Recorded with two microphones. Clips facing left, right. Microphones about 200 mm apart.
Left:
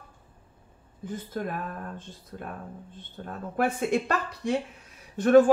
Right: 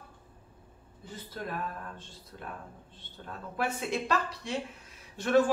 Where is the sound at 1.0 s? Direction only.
50° left (ahead or behind).